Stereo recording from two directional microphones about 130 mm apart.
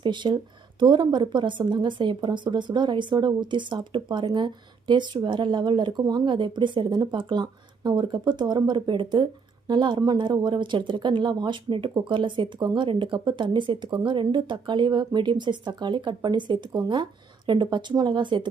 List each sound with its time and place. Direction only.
0.0 s speech: 35° right (ahead or behind)